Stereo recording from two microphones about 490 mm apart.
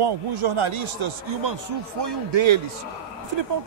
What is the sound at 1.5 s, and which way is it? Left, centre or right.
Speech, right.